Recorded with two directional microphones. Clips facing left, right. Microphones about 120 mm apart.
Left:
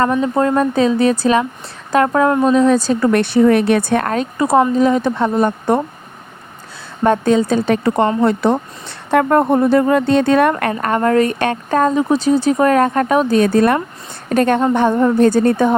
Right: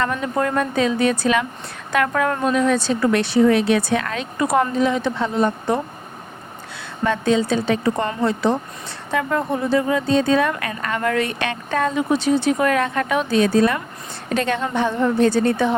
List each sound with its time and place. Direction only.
0.1 s a woman's voice: 25° left (ahead or behind); by 5.8 s 50° left (ahead or behind)
7.0 s a woman's voice: 50° left (ahead or behind)
10.8 s a woman's voice: 40° left (ahead or behind)